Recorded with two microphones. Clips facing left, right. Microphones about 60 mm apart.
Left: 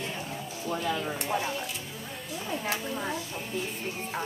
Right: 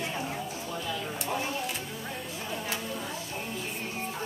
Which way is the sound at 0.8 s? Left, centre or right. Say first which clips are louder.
Left 5 dB; left.